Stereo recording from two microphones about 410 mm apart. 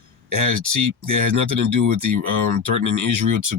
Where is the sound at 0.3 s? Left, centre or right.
Right.